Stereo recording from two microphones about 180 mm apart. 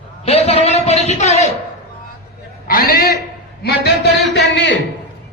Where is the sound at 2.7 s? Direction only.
55° left (ahead or behind).